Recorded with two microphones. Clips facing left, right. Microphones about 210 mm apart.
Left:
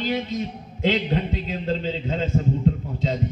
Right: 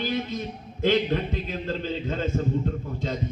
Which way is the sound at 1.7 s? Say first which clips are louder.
Left 4 dB; 50° right (ahead or behind).